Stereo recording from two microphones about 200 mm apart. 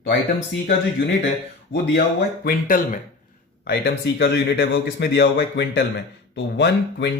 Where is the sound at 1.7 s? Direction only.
25° left (ahead or behind).